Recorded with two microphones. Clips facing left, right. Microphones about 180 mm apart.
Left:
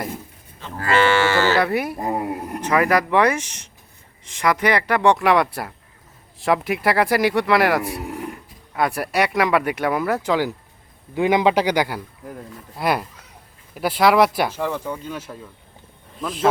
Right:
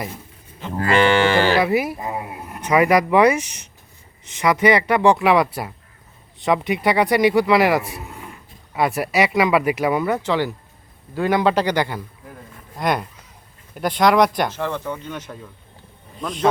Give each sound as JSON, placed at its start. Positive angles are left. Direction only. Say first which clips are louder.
{"t": 0.6, "sound": "speech", "louder": "right 3 dB", "side_deg": -20}
{"t": 1.6, "sound": "speech", "louder": "right 3 dB", "side_deg": 0}
{"t": 2.0, "sound": "speech", "louder": "left 5 dB", "side_deg": 45}
{"t": 2.6, "sound": "speech", "louder": "right 3 dB", "side_deg": -5}
{"t": 10.2, "sound": "a man's voice", "louder": "even", "side_deg": 10}